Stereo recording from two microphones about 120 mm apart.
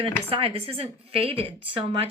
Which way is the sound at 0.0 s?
50° right (ahead or behind).